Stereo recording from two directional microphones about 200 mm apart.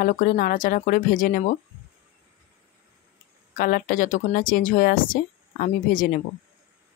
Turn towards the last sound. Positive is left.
turn(degrees=40)  # may be behind; listen again after turning